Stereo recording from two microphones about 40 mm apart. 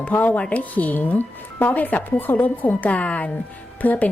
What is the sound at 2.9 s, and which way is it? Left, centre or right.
Speech, left.